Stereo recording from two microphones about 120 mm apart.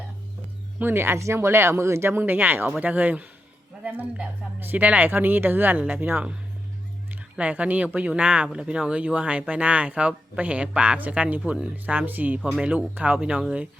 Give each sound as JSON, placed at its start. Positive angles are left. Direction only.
{"t": 0.8, "sound": "speech", "side_deg": -20}
{"t": 7.1, "sound": "a sound", "side_deg": -10}
{"t": 7.9, "sound": "speech", "side_deg": -10}